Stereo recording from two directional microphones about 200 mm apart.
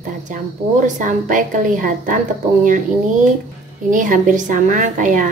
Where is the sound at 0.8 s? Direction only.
40° right (ahead or behind).